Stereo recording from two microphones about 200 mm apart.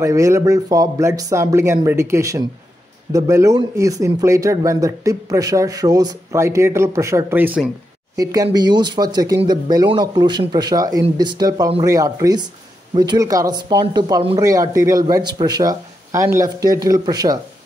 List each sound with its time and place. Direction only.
0.0 s speech: 15° right (ahead or behind)
8.2 s speech: 20° right (ahead or behind)